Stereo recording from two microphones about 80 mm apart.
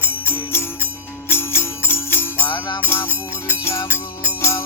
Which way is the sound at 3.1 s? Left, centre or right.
Right.